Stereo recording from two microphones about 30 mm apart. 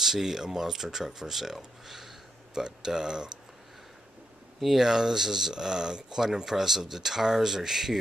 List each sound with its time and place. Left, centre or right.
0.0 s speech: centre
1.9 s a sound: centre
2.5 s speech: right
4.7 s speech: centre